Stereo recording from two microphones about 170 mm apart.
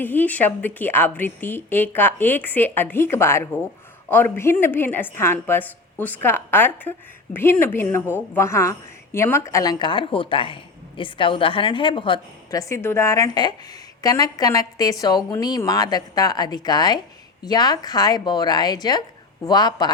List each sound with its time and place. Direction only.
0.0 s a woman's voice: 10° left (ahead or behind)